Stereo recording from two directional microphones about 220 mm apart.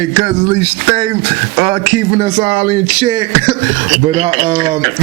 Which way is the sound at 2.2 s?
25° right (ahead or behind).